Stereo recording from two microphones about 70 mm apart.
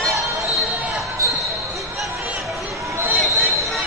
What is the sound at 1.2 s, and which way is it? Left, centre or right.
Basketball bounce, right.